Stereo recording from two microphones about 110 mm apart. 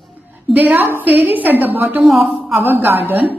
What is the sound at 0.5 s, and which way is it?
A woman's voice, 15° right (ahead or behind).